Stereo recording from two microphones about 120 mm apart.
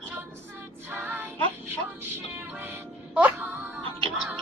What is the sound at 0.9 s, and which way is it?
Child singing, 15° right (ahead or behind).